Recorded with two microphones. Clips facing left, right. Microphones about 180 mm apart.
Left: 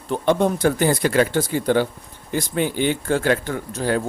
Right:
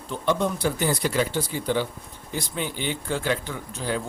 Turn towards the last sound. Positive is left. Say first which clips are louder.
# left 7 dB
turn(degrees=60)  # may be behind; listen again after turning